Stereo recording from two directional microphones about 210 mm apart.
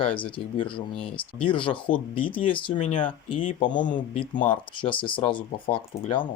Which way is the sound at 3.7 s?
35° left (ahead or behind).